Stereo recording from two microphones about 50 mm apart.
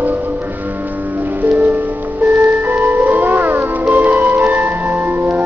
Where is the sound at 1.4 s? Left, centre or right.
Right.